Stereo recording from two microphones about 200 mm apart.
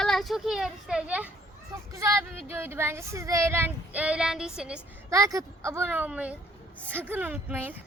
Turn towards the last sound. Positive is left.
turn(degrees=-10)  # may be behind; listen again after turning